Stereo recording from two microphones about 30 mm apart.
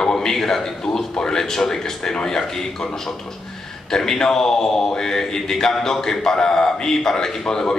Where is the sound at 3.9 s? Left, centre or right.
Centre.